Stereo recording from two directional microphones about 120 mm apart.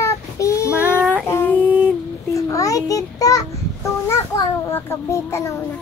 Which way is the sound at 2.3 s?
25° left (ahead or behind).